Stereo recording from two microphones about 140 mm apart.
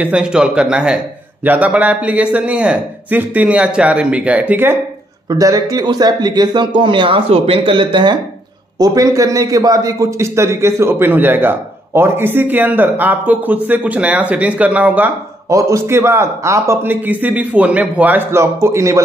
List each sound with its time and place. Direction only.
0.0 s a man's voice: 5° right (ahead or behind)
5.3 s a man's voice: 25° right (ahead or behind)